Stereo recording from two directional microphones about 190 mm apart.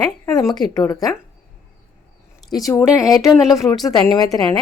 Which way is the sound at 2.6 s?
Centre (ahead or behind).